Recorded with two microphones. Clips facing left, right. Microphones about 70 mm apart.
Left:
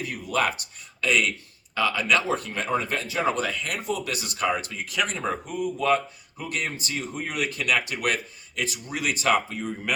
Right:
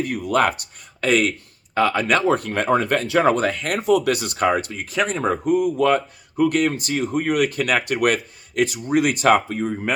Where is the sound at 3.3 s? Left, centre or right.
Right.